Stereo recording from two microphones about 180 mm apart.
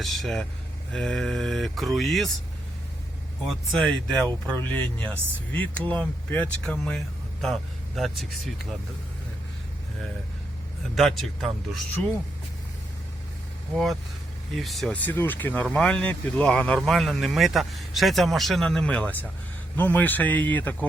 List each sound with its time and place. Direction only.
0.0 s speech: centre (ahead or behind)
3.4 s speech: centre (ahead or behind)
10.9 s speech: centre (ahead or behind)
14.5 s speech: centre (ahead or behind)